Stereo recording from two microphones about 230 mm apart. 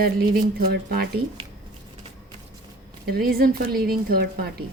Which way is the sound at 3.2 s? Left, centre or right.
Right.